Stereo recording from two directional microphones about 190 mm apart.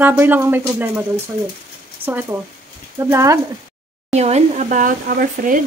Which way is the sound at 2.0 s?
10° right (ahead or behind).